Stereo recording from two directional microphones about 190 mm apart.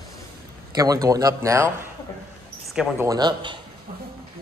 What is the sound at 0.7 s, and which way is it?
Speech, 20° right (ahead or behind).